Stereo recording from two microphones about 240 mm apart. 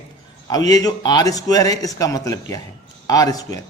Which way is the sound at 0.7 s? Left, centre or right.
Centre.